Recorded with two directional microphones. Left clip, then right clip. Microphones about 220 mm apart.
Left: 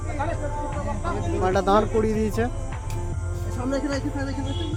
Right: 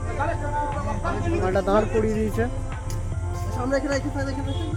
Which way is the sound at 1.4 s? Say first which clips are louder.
Left 2 dB; 5° left (ahead or behind).